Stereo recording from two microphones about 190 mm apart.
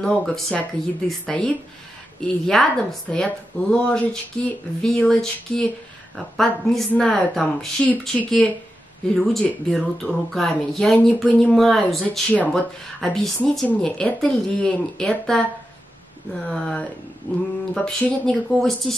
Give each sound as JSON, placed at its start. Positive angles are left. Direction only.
{"t": 0.0, "sound": "speech", "side_deg": 0}
{"t": 16.4, "sound": "speech", "side_deg": 5}